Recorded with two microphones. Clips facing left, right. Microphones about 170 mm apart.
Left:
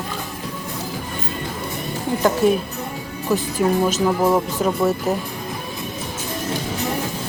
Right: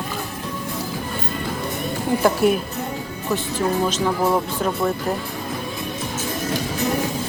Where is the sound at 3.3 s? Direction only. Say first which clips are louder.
Left 3 dB; 5° left (ahead or behind).